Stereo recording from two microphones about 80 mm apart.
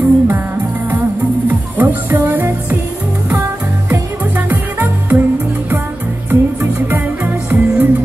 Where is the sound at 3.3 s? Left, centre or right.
Right.